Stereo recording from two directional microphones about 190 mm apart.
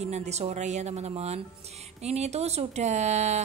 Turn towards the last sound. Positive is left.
turn(degrees=-35)  # may be behind; listen again after turning